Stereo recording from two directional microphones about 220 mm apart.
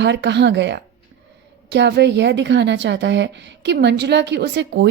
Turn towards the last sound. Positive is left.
turn(degrees=-55)  # may be behind; listen again after turning